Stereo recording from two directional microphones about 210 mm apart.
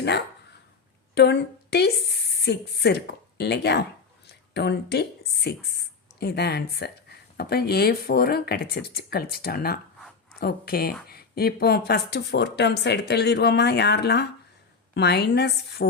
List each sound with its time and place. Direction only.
1.1 s a woman's voice: 55° left (ahead or behind)